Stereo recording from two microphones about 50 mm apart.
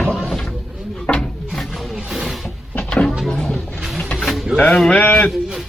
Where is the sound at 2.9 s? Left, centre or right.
Centre.